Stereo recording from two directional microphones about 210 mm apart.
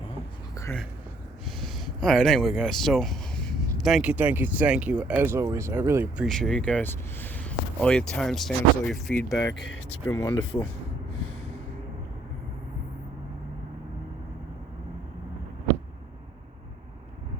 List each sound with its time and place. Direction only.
0.5 s a sound: 15° left (ahead or behind)
1.5 s speech: centre (ahead or behind)
6.2 s speech: centre (ahead or behind)
9.5 s speech: 55° left (ahead or behind)
10.1 s speech: 5° left (ahead or behind)